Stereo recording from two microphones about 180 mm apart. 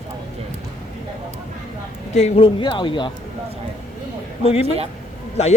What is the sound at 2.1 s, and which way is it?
Speech, 35° left (ahead or behind).